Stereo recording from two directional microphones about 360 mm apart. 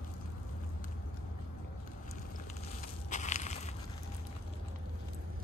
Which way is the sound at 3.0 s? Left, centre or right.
Centre.